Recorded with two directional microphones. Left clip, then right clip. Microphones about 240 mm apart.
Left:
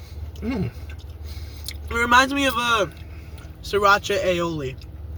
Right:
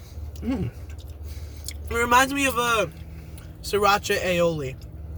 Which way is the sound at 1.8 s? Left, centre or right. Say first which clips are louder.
Left 2 dB; right.